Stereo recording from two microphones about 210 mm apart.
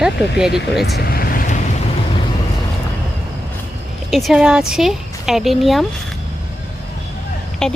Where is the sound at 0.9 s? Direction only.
45° left (ahead or behind).